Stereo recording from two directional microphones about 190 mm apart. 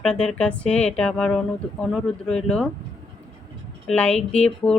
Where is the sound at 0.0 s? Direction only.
5° left (ahead or behind).